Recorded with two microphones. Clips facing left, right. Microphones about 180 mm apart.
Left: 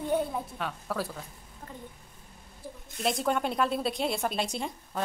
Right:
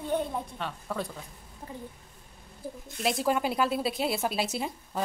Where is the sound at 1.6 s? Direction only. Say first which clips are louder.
Right 3 dB; 20° right (ahead or behind).